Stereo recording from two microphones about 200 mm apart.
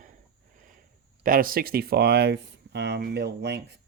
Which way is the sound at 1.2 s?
45° right (ahead or behind).